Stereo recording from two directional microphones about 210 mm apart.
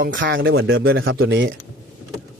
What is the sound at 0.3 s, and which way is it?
A man's voice, 65° right (ahead or behind).